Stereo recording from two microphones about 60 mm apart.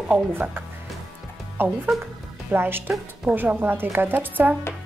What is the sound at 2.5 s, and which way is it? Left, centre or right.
A woman's voice, right.